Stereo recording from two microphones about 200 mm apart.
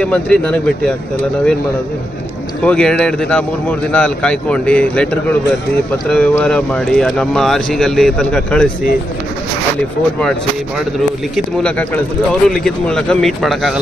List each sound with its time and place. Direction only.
0.0 s speech: 5° left (ahead or behind)
2.6 s speech: 5° left (ahead or behind)
11.3 s speech: 5° left (ahead or behind)